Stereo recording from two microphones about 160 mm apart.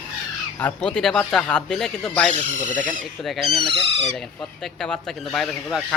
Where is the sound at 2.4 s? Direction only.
50° right (ahead or behind).